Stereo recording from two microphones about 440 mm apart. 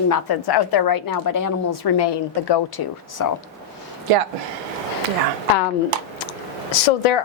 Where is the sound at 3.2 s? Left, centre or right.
Left.